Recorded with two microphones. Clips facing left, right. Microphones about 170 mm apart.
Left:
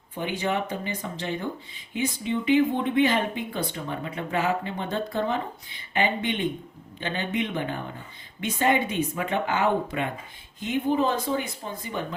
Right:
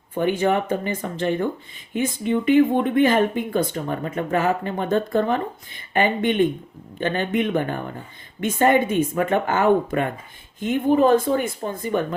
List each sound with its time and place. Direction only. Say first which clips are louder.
0.1 s speech: right 8 dB; 50° right (ahead or behind)